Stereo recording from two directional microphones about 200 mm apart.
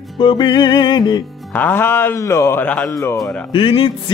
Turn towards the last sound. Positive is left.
turn(degrees=25)  # may be behind; listen again after turning